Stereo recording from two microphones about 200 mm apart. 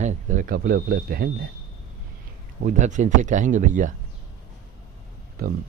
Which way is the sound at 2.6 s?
40° right (ahead or behind).